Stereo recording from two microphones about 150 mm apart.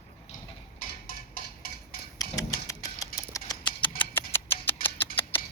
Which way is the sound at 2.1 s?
20° left (ahead or behind).